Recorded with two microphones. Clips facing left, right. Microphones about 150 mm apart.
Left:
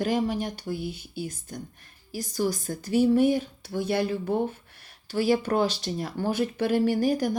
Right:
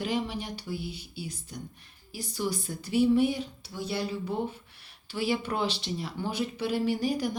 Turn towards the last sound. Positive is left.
turn(degrees=45)  # may be behind; listen again after turning